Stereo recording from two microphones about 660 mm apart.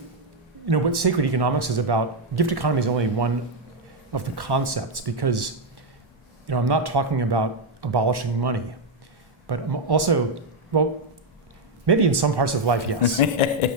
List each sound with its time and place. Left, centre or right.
0.6 s speech: right
6.5 s speech: right
13.1 s a man's voice: left